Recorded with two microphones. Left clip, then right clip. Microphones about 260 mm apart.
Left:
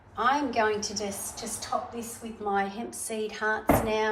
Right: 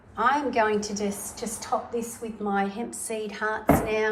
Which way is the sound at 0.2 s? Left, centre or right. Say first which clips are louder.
Right 2 dB; centre.